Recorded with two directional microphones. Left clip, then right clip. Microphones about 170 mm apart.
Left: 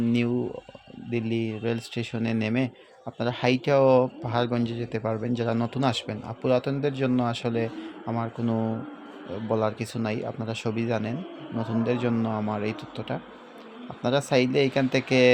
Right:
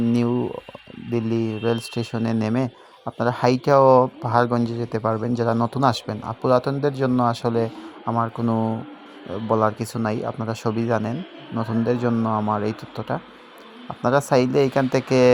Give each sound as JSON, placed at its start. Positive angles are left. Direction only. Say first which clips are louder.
{"t": 0.1, "sound": "speech", "louder": "right 4 dB", "side_deg": -30}